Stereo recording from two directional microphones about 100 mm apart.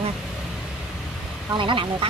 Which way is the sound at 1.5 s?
55° right (ahead or behind).